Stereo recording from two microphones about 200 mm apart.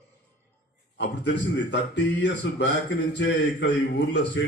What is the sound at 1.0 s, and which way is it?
Speech, 60° left (ahead or behind).